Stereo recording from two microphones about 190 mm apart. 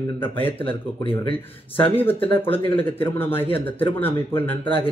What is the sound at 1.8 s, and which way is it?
Speech, 10° left (ahead or behind).